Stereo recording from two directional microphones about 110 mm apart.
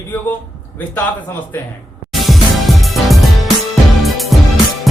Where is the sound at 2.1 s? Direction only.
Centre (ahead or behind).